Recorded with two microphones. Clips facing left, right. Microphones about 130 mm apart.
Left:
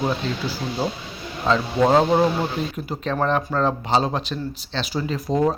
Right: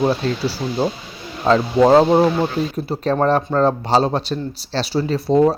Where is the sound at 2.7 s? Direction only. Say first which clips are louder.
Right 6 dB; 35° right (ahead or behind).